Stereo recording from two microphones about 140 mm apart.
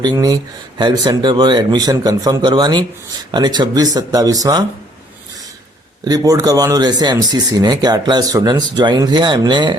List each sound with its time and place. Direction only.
0.0 s speech: 30° right (ahead or behind)
6.1 s speech: 25° right (ahead or behind)